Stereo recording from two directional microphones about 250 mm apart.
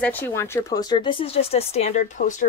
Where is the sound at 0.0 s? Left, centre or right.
Centre.